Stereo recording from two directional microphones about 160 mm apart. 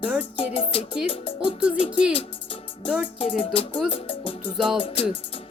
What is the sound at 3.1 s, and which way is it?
Music, 35° left (ahead or behind).